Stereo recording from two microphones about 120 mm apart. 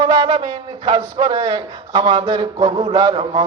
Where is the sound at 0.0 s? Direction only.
35° right (ahead or behind).